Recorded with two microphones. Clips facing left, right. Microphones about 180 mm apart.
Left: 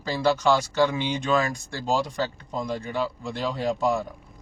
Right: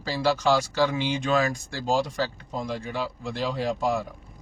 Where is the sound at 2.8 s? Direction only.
Centre (ahead or behind).